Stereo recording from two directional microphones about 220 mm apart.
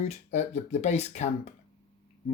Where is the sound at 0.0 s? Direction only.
30° left (ahead or behind).